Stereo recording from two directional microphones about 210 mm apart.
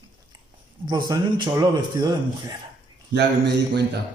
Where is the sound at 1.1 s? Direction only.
20° right (ahead or behind).